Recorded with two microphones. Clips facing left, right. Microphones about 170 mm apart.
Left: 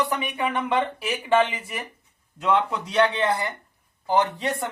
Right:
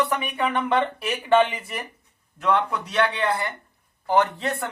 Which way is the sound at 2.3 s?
20° left (ahead or behind).